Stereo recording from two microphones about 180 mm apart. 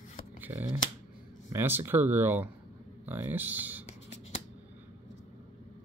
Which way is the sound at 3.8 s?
40° left (ahead or behind).